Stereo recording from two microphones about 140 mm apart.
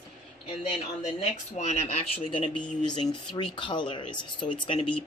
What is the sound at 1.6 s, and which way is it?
Speech, 50° left (ahead or behind).